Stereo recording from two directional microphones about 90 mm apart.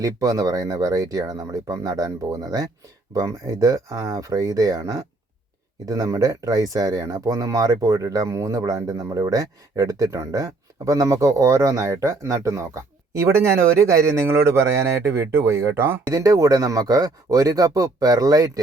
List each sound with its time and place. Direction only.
0.0 s speech: 40° right (ahead or behind); by 16.0 s 25° right (ahead or behind)
16.0 s speech: 40° right (ahead or behind)